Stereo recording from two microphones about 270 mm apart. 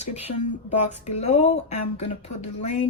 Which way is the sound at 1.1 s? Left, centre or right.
Left.